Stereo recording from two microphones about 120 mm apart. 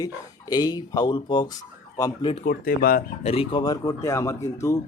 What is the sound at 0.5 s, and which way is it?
Speech, 35° left (ahead or behind).